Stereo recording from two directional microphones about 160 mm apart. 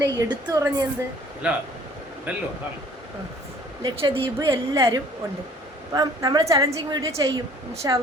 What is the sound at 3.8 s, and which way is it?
Speech, 30° right (ahead or behind).